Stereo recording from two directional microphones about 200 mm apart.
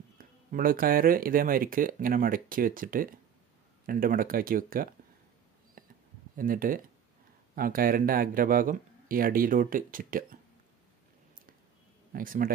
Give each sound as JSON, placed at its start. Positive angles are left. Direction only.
{"t": 0.2, "sound": "speech", "side_deg": -45}
{"t": 5.8, "sound": "a sound", "side_deg": -45}
{"t": 6.3, "sound": "speech", "side_deg": -45}
{"t": 12.1, "sound": "speech", "side_deg": -45}